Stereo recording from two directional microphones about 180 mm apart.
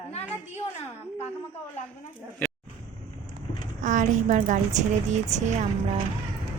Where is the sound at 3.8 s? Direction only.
45° right (ahead or behind).